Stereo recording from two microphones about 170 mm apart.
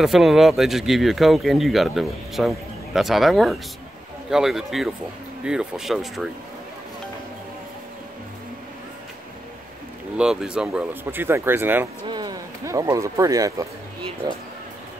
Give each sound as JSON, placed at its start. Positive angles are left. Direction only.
{"t": 0.0, "sound": "speech", "side_deg": 0}
{"t": 10.1, "sound": "speech", "side_deg": -5}
{"t": 12.1, "sound": "speech", "side_deg": -25}